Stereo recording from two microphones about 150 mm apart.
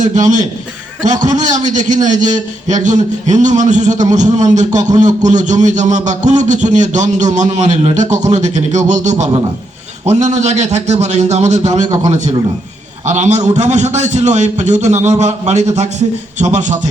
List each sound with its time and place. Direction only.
0.0 s a man's voice: 55° right (ahead or behind)